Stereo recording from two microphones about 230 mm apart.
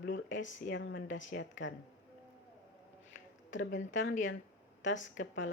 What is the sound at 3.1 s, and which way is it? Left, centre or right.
Speech, left.